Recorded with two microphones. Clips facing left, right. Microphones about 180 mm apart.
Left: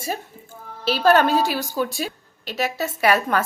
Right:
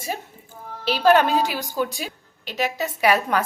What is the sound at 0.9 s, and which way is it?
A woman's voice, 15° right (ahead or behind).